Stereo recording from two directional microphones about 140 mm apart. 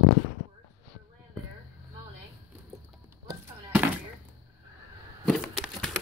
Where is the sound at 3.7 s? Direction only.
10° right (ahead or behind).